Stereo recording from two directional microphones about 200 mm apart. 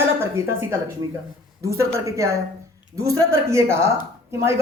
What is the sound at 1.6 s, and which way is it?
Speech, 15° right (ahead or behind).